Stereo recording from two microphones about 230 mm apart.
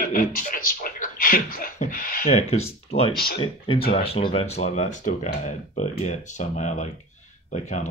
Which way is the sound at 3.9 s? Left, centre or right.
Left.